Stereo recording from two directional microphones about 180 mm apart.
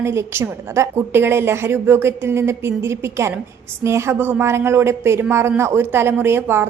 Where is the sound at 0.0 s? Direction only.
15° right (ahead or behind).